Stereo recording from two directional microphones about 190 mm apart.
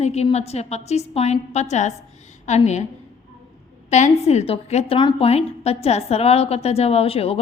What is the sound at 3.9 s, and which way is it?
A woman's voice, 35° left (ahead or behind).